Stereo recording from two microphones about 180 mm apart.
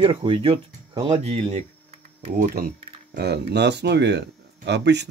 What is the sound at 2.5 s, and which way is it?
Speech, 55° right (ahead or behind).